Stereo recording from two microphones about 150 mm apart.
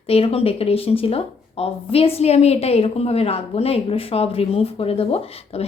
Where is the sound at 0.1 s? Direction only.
40° left (ahead or behind).